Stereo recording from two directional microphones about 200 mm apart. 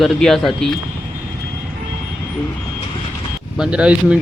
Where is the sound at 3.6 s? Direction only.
5° right (ahead or behind).